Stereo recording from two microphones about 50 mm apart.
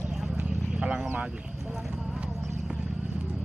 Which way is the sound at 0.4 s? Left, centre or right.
Centre.